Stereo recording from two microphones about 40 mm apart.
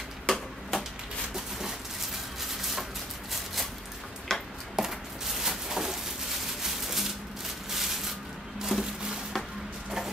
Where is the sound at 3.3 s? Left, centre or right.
Centre.